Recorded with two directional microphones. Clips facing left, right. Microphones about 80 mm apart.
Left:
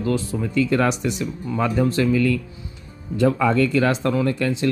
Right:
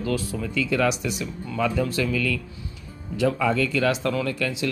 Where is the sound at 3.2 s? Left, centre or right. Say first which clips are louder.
Left 4 dB; left.